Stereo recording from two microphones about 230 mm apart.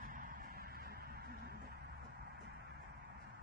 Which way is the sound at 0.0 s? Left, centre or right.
Right.